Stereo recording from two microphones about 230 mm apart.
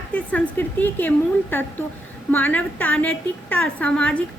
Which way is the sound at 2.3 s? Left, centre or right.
Centre.